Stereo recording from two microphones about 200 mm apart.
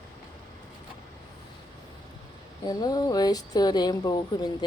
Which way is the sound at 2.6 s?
20° left (ahead or behind).